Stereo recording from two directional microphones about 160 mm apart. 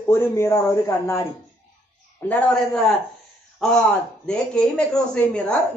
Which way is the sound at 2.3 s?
5° left (ahead or behind).